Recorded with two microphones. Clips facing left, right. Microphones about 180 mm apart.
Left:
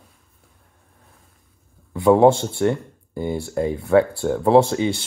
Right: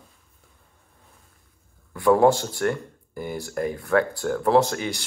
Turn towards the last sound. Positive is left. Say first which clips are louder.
# left 5 dB
turn(degrees=25)  # may be behind; listen again after turning